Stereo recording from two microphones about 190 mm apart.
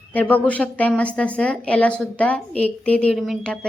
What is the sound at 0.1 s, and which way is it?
A woman's voice, 10° left (ahead or behind).